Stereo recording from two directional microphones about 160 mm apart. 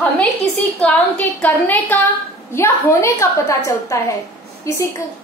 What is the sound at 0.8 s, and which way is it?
A woman's voice, 10° left (ahead or behind).